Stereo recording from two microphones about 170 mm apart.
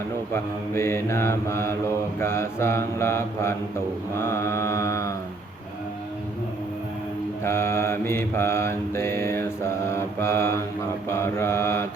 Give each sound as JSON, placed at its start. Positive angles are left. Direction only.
{"t": 0.7, "sound": "mantra", "side_deg": 15}
{"t": 7.4, "sound": "mantra", "side_deg": 15}